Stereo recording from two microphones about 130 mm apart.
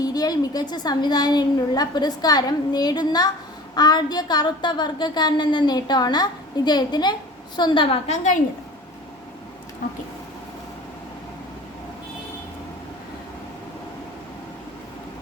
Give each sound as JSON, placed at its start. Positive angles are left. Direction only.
{"t": 0.0, "sound": "a woman's voice", "side_deg": 30}
{"t": 8.0, "sound": "a woman's voice", "side_deg": 65}